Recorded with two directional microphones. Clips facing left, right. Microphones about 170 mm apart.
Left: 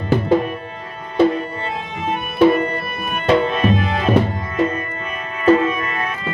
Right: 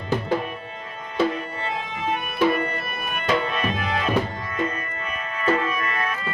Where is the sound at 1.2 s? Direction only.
35° left (ahead or behind).